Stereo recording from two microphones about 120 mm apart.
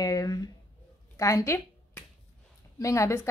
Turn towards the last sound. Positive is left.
turn(degrees=25)  # may be behind; listen again after turning